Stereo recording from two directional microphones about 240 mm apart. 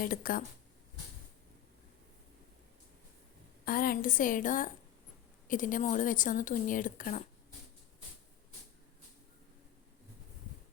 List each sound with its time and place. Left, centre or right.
0.0 s a woman's voice: left
3.7 s a woman's voice: left